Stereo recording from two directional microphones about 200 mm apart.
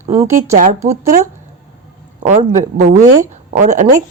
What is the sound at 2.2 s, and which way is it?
A woman's voice, 35° right (ahead or behind).